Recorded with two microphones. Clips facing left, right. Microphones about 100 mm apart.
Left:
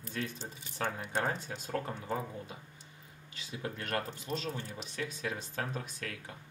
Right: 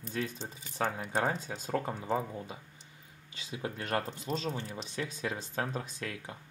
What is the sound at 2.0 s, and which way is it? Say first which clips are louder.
Speech: right 4 dB; 25° right (ahead or behind).